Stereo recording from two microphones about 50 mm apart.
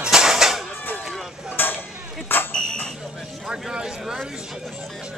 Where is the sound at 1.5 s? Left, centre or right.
Left.